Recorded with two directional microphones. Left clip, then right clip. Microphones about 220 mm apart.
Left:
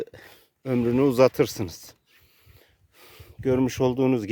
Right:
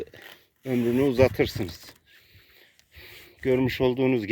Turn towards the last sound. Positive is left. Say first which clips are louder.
# left 1 dB
turn(degrees=30)  # may be behind; listen again after turning